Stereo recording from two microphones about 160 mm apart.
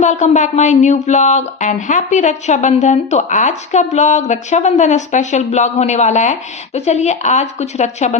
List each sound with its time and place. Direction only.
0.0 s speech: 50° left (ahead or behind)